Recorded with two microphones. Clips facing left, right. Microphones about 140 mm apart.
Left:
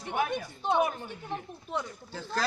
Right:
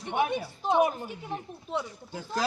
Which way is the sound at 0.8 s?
35° right (ahead or behind).